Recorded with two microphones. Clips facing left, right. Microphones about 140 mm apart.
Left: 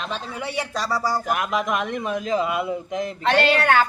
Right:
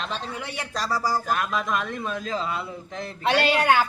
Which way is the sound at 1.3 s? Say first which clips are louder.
Left 2 dB; 20° left (ahead or behind).